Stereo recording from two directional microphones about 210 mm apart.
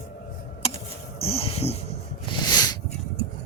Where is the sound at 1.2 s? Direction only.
25° left (ahead or behind).